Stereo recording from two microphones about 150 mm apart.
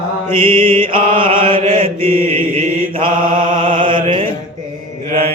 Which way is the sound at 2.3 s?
40° right (ahead or behind).